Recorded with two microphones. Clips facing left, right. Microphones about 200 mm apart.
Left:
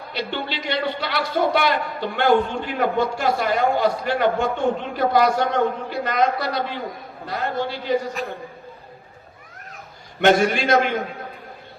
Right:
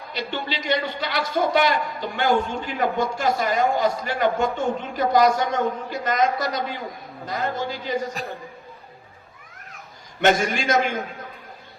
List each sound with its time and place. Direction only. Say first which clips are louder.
0.1 s a man's voice: left 1 dB; 45° right (ahead or behind)
10.3 s a man's voice: left 4 dB; 45° right (ahead or behind)